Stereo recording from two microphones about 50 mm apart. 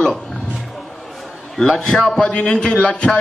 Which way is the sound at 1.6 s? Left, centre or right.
Centre.